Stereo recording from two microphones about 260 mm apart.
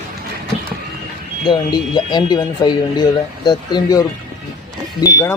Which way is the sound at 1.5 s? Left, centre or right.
Centre.